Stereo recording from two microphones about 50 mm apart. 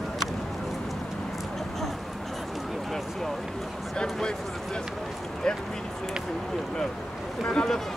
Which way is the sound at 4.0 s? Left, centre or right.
Centre.